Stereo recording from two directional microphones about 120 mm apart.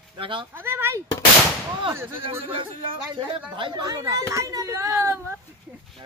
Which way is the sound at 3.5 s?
40° right (ahead or behind).